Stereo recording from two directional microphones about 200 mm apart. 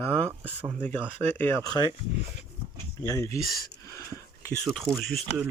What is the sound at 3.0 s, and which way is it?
Speech, 15° left (ahead or behind).